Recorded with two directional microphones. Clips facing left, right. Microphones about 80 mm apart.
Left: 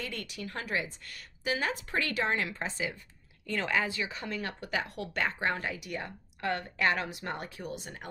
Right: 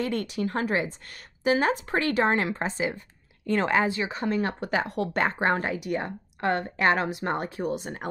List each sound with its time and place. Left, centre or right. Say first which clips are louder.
0.0 s speech: right 11 dB; right